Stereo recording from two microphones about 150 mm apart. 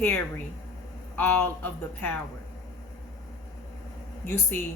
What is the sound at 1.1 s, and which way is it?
Speech, 15° left (ahead or behind).